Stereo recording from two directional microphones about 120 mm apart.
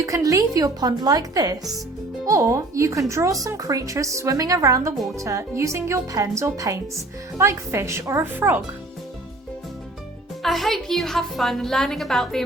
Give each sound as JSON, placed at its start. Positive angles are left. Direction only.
{"t": 0.0, "sound": "speech", "side_deg": -25}
{"t": 10.4, "sound": "a woman's voice", "side_deg": 0}